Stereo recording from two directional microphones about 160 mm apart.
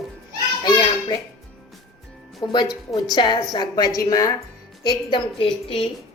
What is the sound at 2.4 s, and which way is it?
Speech, 25° left (ahead or behind).